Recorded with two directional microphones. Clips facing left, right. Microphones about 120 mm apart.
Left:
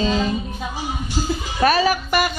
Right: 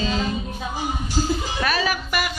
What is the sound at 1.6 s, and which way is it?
Speech, 40° left (ahead or behind).